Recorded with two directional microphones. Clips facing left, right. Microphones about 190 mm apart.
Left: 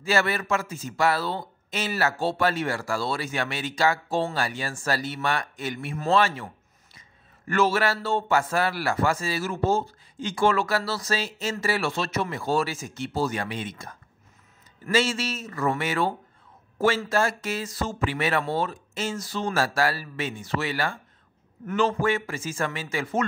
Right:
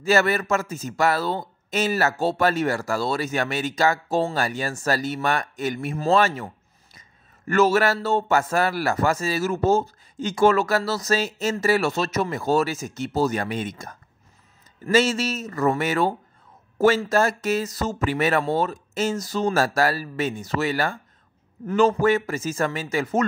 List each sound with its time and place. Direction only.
0.0 s speech: 45° right (ahead or behind)